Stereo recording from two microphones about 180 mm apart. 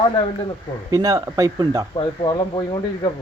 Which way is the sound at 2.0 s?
25° left (ahead or behind).